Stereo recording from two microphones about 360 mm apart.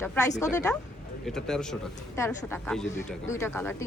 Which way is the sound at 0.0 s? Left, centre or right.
Centre.